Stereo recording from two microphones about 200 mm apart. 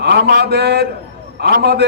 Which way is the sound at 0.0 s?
55° right (ahead or behind).